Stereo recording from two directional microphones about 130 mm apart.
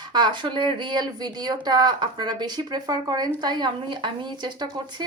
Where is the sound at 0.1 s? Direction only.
35° right (ahead or behind).